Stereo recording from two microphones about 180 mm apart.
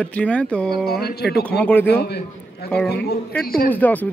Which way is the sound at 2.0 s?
65° left (ahead or behind).